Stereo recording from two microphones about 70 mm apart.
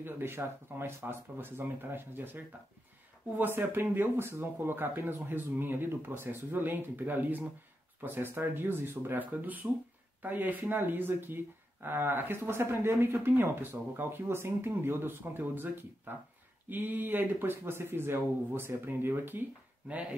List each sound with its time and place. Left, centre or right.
0.0 s speech: right
19.9 s speech: centre